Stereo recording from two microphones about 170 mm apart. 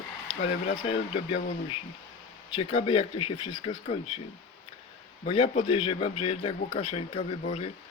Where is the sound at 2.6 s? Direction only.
35° left (ahead or behind).